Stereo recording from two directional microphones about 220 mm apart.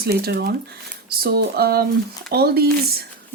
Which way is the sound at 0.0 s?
45° right (ahead or behind).